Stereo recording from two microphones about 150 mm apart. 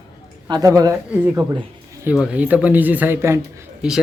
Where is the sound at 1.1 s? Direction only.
10° right (ahead or behind).